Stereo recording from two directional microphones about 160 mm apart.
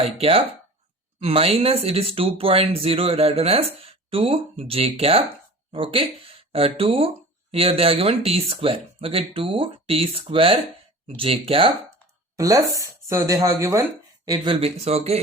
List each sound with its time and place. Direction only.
0.0 s speech: 35° right (ahead or behind)
12.4 s speech: 20° right (ahead or behind)
14.5 s speech: 40° right (ahead or behind)